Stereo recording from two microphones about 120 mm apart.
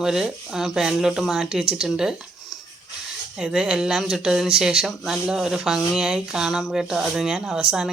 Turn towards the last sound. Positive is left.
turn(degrees=-5)  # may be behind; listen again after turning